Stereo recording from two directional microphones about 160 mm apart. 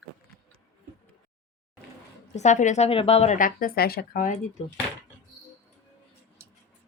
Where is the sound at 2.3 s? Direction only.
45° left (ahead or behind).